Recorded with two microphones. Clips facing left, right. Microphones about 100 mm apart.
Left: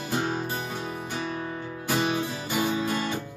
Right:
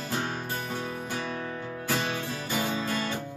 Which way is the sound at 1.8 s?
15° left (ahead or behind).